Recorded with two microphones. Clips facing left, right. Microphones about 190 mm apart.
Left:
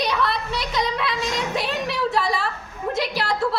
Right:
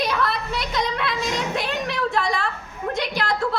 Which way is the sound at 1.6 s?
Centre (ahead or behind).